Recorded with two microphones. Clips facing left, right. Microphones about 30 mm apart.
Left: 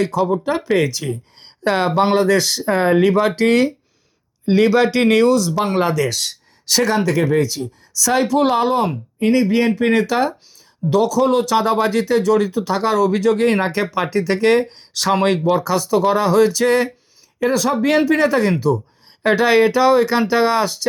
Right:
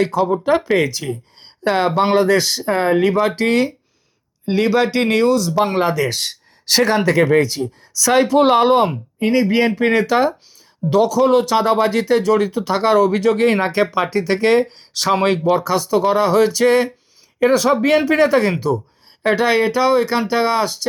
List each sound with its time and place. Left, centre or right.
0.0 s speech: centre
5.9 s speech: centre; by 7.7 s right
7.9 s speech: right
9.1 s speech: centre
14.9 s speech: centre
17.5 s speech: right
17.7 s speech: centre
19.2 s speech: centre